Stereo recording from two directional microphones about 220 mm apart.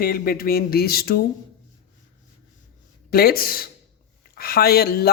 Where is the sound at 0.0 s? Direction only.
40° left (ahead or behind).